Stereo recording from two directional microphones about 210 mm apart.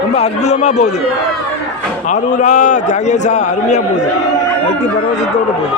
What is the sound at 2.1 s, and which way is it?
A man's voice, 35° left (ahead or behind).